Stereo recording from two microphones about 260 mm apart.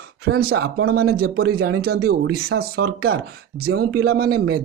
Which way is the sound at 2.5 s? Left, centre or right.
Right.